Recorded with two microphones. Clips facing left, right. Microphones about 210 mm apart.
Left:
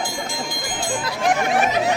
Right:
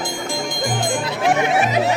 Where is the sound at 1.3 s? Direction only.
Centre (ahead or behind).